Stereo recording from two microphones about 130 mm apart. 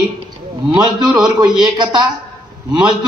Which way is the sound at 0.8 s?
35° right (ahead or behind).